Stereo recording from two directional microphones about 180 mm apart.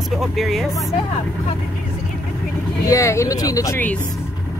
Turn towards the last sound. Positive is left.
turn(degrees=10)  # may be behind; listen again after turning